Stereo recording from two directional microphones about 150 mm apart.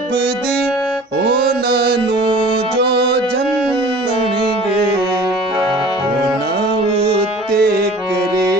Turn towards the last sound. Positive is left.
turn(degrees=-90)